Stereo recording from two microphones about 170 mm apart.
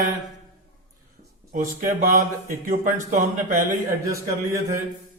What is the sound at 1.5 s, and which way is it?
A man's voice, 50° right (ahead or behind).